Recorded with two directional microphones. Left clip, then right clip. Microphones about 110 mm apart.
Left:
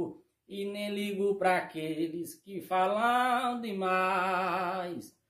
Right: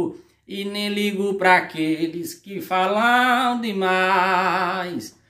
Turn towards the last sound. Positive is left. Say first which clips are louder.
# right 10 dB
turn(degrees=15)  # may be behind; listen again after turning